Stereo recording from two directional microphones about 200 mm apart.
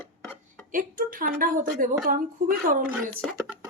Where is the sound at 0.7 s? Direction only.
45° right (ahead or behind).